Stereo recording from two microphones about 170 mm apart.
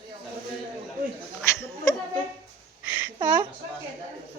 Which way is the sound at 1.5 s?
15° left (ahead or behind).